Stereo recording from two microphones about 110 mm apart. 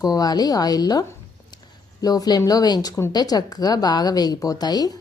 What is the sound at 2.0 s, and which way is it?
Speech, 35° left (ahead or behind).